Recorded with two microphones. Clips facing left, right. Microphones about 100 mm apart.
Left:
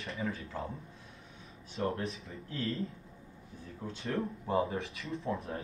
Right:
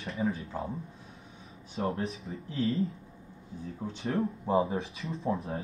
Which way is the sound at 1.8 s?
30° right (ahead or behind).